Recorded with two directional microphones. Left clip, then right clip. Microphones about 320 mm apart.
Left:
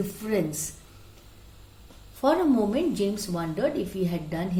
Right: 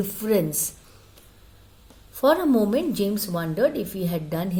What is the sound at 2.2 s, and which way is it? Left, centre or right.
A woman's voice, right.